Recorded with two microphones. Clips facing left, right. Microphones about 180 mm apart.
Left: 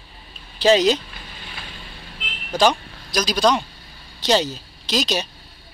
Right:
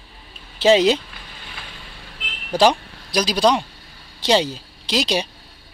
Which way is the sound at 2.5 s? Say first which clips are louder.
Right 2 dB; 30° right (ahead or behind).